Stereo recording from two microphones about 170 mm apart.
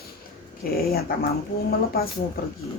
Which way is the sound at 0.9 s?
65° left (ahead or behind).